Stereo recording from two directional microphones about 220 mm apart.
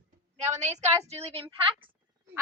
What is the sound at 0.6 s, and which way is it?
A woman's voice, 30° right (ahead or behind).